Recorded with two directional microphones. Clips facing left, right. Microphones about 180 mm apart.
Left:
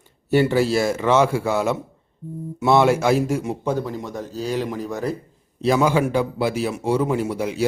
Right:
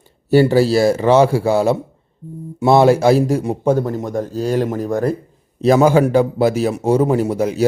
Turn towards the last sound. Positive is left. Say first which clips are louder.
# right 6 dB
turn(degrees=-40)  # may be behind; listen again after turning